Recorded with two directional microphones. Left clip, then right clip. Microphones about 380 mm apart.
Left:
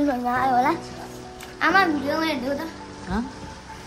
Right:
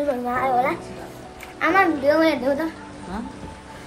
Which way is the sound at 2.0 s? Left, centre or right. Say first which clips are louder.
Right 7 dB; centre.